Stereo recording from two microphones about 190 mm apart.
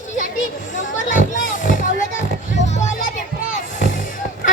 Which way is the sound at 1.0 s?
45° left (ahead or behind).